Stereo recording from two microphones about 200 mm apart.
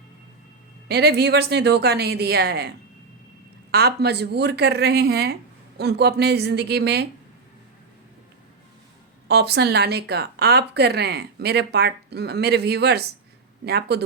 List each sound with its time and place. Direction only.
0.9 s a woman's voice: 55° right (ahead or behind)
9.2 s a woman's voice: 55° right (ahead or behind)